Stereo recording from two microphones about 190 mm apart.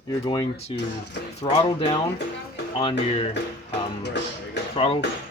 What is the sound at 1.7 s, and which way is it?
Speech, 25° left (ahead or behind).